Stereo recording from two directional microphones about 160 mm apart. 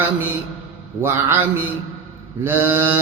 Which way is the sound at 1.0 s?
15° right (ahead or behind).